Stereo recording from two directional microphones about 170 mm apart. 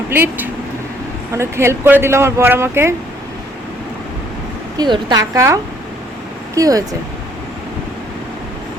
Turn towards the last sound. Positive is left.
turn(degrees=-20)  # may be behind; listen again after turning